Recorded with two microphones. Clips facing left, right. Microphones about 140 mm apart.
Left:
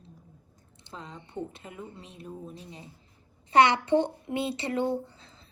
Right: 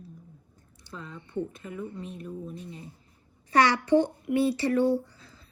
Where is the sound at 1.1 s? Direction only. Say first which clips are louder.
Right 5 dB; 15° left (ahead or behind).